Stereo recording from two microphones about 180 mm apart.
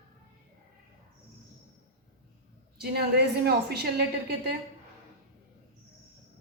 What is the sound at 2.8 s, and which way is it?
A woman's voice, 60° right (ahead or behind).